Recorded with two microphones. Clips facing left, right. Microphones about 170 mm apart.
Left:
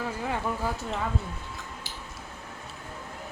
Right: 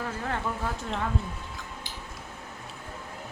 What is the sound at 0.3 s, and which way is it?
Speech, 5° left (ahead or behind).